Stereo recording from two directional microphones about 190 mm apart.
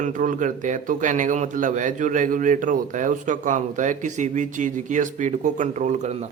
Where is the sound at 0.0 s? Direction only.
45° right (ahead or behind).